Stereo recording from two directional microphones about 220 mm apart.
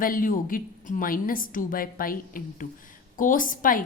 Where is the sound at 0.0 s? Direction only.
40° left (ahead or behind).